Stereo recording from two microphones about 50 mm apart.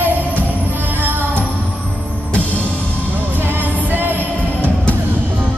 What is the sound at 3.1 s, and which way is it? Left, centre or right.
Music, right.